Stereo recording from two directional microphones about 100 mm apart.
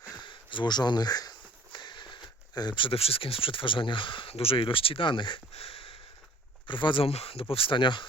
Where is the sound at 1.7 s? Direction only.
50° left (ahead or behind).